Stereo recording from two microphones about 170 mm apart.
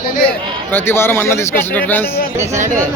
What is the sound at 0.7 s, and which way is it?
Speech, 10° left (ahead or behind).